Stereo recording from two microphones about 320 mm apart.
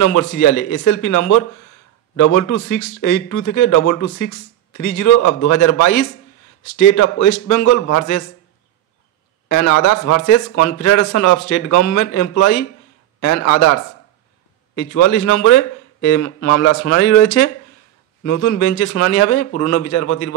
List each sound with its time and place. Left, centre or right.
0.0 s speech: left
9.5 s a man's voice: left
14.8 s speech: left